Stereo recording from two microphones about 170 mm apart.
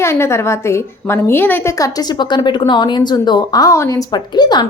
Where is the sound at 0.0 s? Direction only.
15° left (ahead or behind).